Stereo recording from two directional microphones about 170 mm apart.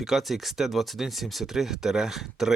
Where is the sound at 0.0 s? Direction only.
Centre (ahead or behind).